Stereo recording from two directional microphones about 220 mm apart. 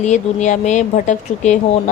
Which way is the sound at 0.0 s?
35° left (ahead or behind).